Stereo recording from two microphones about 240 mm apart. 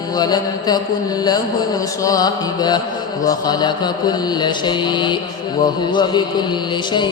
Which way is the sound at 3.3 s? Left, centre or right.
Centre.